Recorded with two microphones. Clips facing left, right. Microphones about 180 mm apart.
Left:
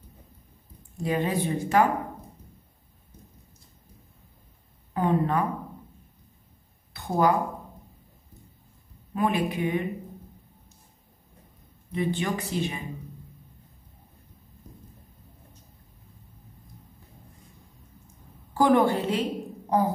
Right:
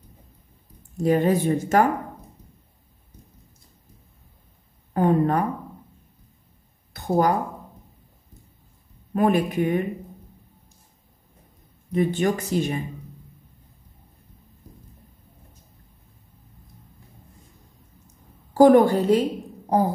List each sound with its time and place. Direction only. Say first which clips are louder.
0.9 s speech: right 7 dB; 45° right (ahead or behind)
4.9 s speech: right 4 dB; 45° right (ahead or behind)
6.9 s a sound: right 2 dB; 45° right (ahead or behind)
9.1 s speech: right 5 dB; 45° right (ahead or behind)
11.9 s speech: right 6 dB; 45° right (ahead or behind)
18.0 s a sound: left 1 dB; 40° right (ahead or behind)